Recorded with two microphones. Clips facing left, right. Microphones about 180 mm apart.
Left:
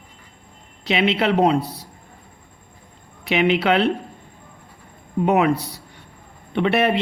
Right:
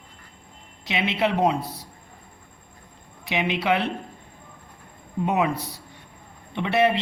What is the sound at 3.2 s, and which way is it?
Speech, 70° left (ahead or behind).